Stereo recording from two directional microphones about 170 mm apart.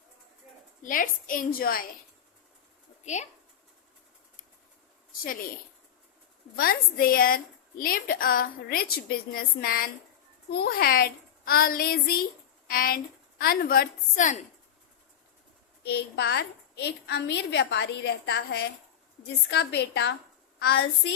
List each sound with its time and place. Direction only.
0.8 s a woman's voice: 55° left (ahead or behind)
3.0 s speech: 45° left (ahead or behind)
5.2 s a woman's voice: 60° left (ahead or behind)
6.6 s a woman's voice: 60° left (ahead or behind)
15.8 s a woman's voice: 80° left
20.6 s a woman's voice: 75° left (ahead or behind)